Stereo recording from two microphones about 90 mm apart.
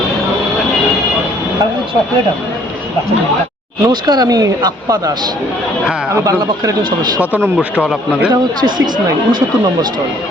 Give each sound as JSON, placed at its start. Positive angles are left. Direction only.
{"t": 3.8, "sound": "speech", "side_deg": -50}
{"t": 7.3, "sound": "speech", "side_deg": -15}